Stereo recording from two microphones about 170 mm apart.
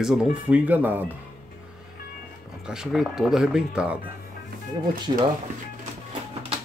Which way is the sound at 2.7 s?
5° right (ahead or behind).